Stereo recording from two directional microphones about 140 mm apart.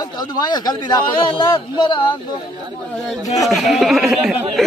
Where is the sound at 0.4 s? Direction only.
30° left (ahead or behind).